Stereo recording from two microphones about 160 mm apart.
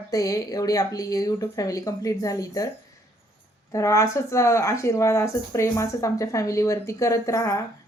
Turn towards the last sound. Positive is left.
turn(degrees=20)  # may be behind; listen again after turning